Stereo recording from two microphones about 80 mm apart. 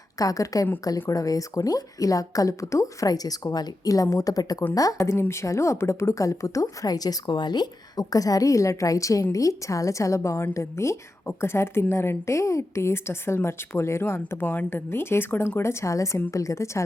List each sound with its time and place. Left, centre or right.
0.2 s speech: left
5.1 s a woman's voice: left
14.4 s speech: centre
14.8 s a woman's voice: left